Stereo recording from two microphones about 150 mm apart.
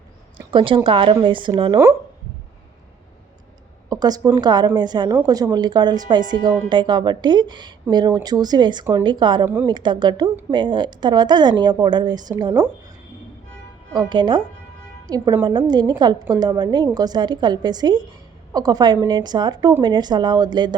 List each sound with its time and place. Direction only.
0.5 s speech: 35° right (ahead or behind)
3.8 s a sound: 25° right (ahead or behind)
4.4 s a woman's voice: 30° right (ahead or behind)
13.9 s a woman's voice: 30° right (ahead or behind)